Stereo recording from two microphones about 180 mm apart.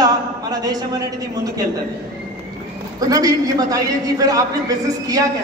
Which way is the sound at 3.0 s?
20° right (ahead or behind).